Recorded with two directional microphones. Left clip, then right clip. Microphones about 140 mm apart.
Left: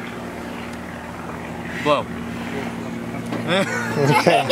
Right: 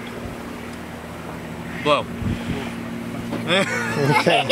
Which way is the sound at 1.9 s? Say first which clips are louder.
Even; 5° right (ahead or behind).